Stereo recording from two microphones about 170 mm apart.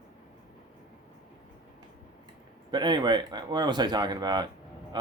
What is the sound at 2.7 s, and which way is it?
Speech, 25° right (ahead or behind).